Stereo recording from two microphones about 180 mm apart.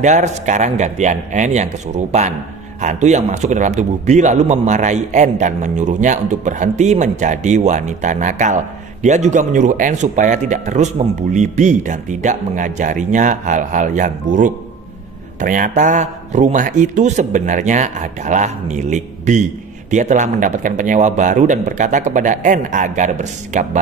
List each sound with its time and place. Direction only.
0.0 s a man's voice: 40° right (ahead or behind)